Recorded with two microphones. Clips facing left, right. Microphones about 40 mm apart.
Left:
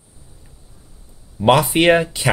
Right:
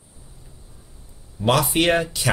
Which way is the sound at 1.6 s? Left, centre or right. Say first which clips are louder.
Left 5 dB; centre.